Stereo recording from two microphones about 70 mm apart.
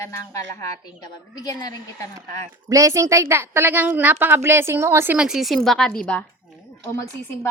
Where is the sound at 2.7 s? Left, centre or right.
Right.